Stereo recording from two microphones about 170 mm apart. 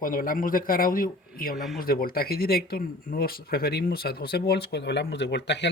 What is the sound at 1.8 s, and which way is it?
Speech, 60° left (ahead or behind).